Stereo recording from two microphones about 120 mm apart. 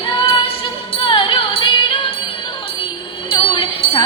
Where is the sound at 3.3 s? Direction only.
45° left (ahead or behind).